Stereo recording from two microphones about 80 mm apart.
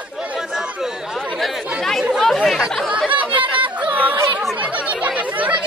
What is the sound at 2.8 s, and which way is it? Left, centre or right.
Chatter, centre.